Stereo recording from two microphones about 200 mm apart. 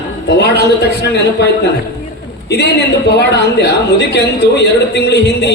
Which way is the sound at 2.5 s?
55° left (ahead or behind).